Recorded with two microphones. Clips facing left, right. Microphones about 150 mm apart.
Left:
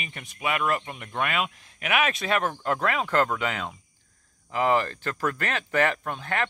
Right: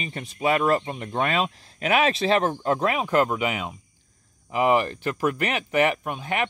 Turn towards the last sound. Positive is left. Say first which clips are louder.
# right 2 dB
turn(degrees=-15)  # may be behind; listen again after turning